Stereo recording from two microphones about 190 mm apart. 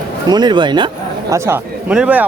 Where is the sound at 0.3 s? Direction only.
20° right (ahead or behind).